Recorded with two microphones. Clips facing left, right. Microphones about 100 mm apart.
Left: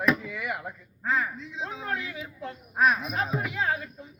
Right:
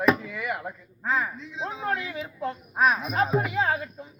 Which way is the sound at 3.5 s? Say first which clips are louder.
Right 3 dB; 30° right (ahead or behind).